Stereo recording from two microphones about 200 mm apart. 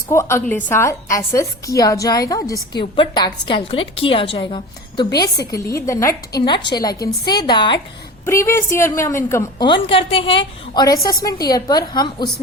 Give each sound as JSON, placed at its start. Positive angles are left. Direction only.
{"t": 0.1, "sound": "a woman's voice", "side_deg": 15}